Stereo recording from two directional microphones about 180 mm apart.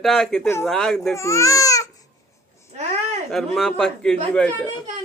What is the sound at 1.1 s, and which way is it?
Speech, 15° left (ahead or behind).